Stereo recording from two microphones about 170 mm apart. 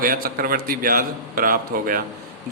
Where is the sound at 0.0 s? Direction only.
60° right (ahead or behind).